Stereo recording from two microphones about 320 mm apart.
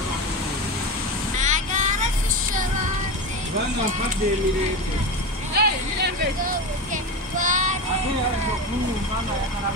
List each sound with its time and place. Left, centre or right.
1.4 s vehicle: right
5.6 s vehicle: right